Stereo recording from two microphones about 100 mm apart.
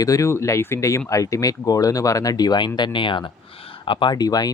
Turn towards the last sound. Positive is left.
turn(degrees=40)  # may be behind; listen again after turning